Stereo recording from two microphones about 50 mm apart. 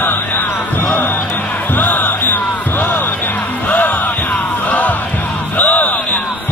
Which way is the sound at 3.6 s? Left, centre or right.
Left.